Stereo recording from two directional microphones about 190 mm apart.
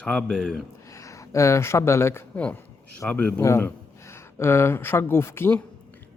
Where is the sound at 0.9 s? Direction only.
15° left (ahead or behind).